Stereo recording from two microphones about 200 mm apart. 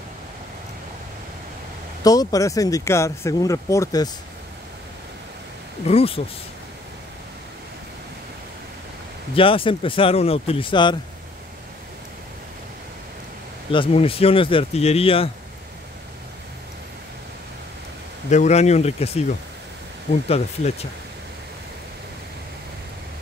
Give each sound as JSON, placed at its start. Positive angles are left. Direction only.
{"t": 2.0, "sound": "speech", "side_deg": 15}
{"t": 5.9, "sound": "speech", "side_deg": 30}
{"t": 9.3, "sound": "speech", "side_deg": 25}
{"t": 13.7, "sound": "speech", "side_deg": 25}
{"t": 18.3, "sound": "speech", "side_deg": 35}
{"t": 20.2, "sound": "speech", "side_deg": 30}